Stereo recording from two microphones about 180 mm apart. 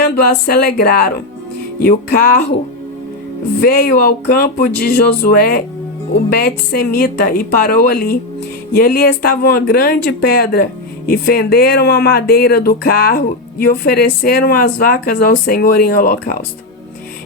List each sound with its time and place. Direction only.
0.0 s speech: 55° left (ahead or behind)
3.6 s speech: 55° left (ahead or behind)